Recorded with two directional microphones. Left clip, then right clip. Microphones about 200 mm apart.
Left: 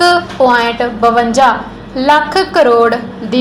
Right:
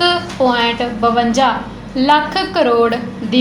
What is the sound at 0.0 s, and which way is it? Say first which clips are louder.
A woman's voice: left 5 dB; 20° left (ahead or behind).